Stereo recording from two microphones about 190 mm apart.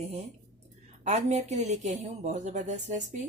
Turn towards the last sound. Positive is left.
turn(degrees=-40)  # may be behind; listen again after turning